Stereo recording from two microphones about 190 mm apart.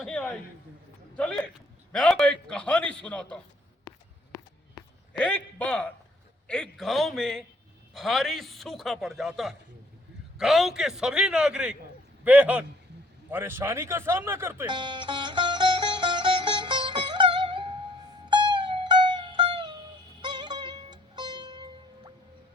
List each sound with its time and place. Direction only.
0.0 s a sound: 5° left (ahead or behind)
1.1 s a man's voice: 5° left (ahead or behind)
3.8 s walk: 20° left (ahead or behind)
5.1 s a man's voice: 5° left (ahead or behind); by 14.7 s 15° right (ahead or behind)
14.7 s music: 25° right (ahead or behind)
18.9 s music: 25° right (ahead or behind)